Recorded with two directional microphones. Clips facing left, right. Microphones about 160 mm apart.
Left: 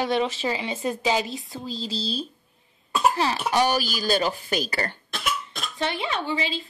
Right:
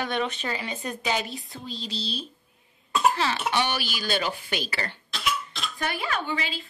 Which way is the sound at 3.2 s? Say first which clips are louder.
Left 4 dB; 35° left (ahead or behind).